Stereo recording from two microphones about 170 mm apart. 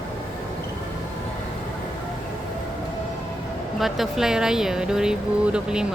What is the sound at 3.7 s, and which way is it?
Speech, centre (ahead or behind).